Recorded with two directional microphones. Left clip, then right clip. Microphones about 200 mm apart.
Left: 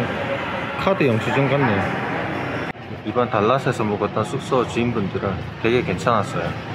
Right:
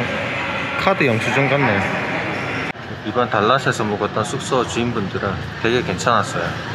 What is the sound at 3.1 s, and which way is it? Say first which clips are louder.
Speech: right 2 dB; 5° left (ahead or behind).